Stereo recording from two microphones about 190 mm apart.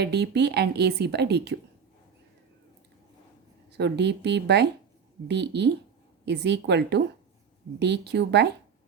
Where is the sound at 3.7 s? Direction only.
65° right (ahead or behind).